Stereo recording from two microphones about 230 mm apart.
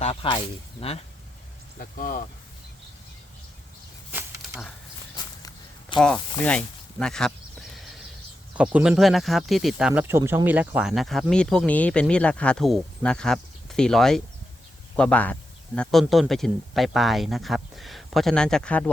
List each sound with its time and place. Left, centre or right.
0.0 s speech: left
1.8 s speech: left
4.1 s a sound: centre
6.0 s speech: centre
8.5 s speech: centre